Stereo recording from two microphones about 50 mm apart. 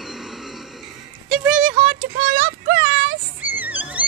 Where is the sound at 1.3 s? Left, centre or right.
Centre.